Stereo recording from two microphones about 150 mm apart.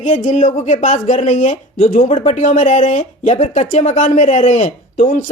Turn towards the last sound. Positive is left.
turn(degrees=60)  # may be behind; listen again after turning